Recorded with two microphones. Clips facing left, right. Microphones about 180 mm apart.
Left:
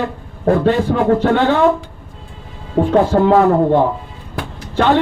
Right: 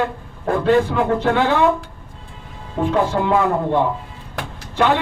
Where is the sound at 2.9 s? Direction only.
40° left (ahead or behind).